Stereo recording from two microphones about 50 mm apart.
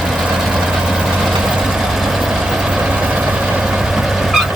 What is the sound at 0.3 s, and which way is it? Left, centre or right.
Vehicle, centre.